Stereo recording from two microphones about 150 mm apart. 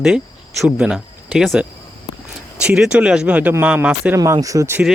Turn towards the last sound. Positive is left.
turn(degrees=-15)  # may be behind; listen again after turning